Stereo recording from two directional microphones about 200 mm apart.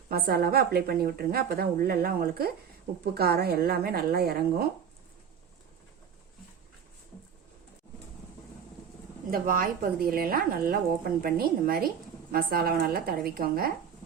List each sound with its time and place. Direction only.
0.1 s speech: 50° right (ahead or behind)
9.3 s speech: 45° right (ahead or behind)